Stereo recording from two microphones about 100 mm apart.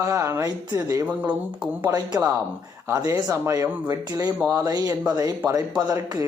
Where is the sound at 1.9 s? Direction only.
40° right (ahead or behind).